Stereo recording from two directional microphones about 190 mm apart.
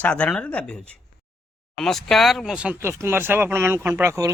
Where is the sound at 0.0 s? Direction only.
5° left (ahead or behind).